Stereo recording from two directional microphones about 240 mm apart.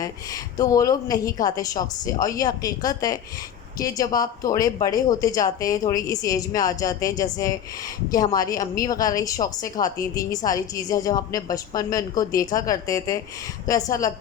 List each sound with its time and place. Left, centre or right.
0.5 s a woman's voice: centre